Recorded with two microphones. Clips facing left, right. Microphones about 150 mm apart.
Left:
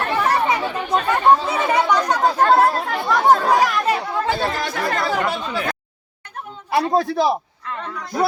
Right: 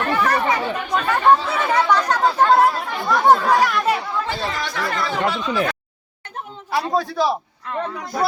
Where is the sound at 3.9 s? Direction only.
50° left (ahead or behind).